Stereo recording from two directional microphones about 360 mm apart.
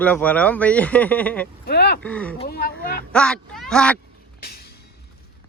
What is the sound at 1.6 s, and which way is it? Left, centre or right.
Speech, left.